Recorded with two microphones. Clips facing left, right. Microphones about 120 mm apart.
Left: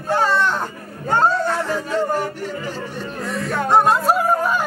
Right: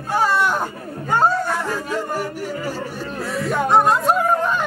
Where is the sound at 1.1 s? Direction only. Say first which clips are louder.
Left 1 dB; 10° right (ahead or behind).